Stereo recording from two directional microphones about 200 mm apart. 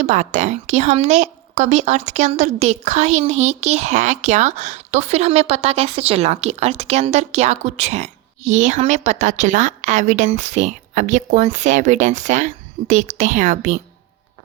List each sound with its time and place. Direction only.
0.0 s a woman's voice: 35° right (ahead or behind)